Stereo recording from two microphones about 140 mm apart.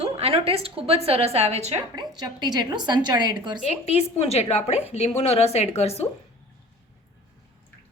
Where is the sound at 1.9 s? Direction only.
30° right (ahead or behind).